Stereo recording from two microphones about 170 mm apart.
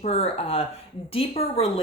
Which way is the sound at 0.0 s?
35° left (ahead or behind).